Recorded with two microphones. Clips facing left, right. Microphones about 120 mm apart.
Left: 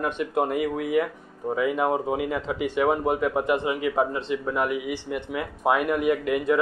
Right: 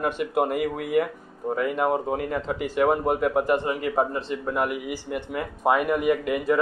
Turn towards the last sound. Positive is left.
turn(degrees=0)  # may be behind; listen again after turning